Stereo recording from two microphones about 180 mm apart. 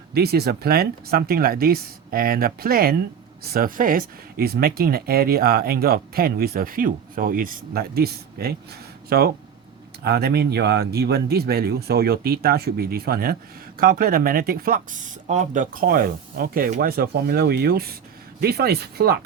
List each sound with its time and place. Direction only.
0.1 s speech: 60° right (ahead or behind)